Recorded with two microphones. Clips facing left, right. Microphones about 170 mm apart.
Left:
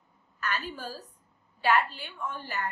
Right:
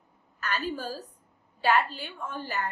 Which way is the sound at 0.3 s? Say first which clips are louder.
Right 3 dB; 35° right (ahead or behind).